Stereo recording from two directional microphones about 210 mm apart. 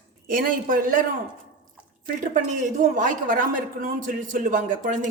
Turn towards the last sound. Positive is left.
turn(degrees=-40)  # may be behind; listen again after turning